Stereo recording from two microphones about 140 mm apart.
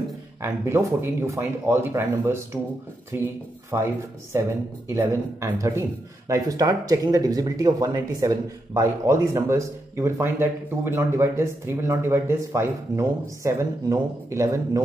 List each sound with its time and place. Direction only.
0.4 s speech: 20° right (ahead or behind)
3.7 s a man's voice: 20° right (ahead or behind)